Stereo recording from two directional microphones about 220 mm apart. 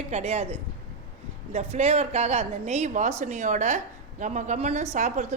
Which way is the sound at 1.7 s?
30° right (ahead or behind).